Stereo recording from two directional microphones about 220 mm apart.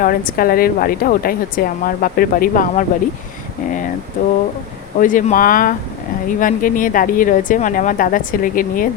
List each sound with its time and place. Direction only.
0.0 s a woman's voice: 40° left (ahead or behind)
4.9 s a woman's voice: 35° left (ahead or behind)